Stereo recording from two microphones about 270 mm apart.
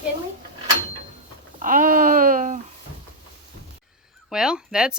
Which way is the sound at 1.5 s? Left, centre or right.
Right.